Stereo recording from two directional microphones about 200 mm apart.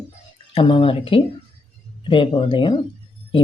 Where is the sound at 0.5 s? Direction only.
25° left (ahead or behind).